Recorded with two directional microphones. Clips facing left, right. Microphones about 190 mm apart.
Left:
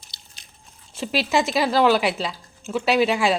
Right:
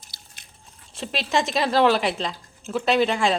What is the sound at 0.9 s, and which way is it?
A woman's voice, 5° left (ahead or behind).